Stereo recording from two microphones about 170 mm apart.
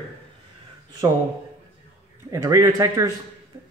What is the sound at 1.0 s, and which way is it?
Speech, 20° right (ahead or behind).